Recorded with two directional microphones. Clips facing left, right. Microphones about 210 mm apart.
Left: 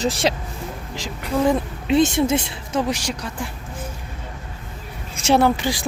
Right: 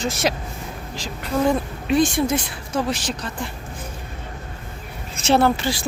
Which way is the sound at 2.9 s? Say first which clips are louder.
Left 1 dB; 10° left (ahead or behind).